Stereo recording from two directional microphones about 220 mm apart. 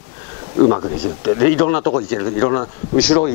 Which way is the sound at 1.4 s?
15° left (ahead or behind).